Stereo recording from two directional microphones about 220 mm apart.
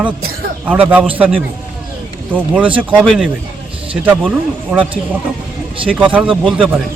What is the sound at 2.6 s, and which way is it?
Speech, 25° right (ahead or behind).